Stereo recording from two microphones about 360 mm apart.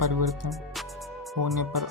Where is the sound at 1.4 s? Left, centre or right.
Right.